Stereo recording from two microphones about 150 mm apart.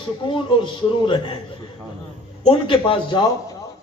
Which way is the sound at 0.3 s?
35° left (ahead or behind).